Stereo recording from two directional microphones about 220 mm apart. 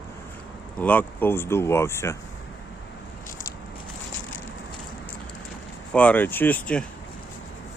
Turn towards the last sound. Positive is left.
turn(degrees=5)  # may be behind; listen again after turning